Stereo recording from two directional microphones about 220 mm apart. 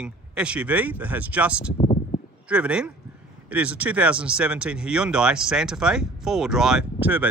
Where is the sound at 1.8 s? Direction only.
25° left (ahead or behind).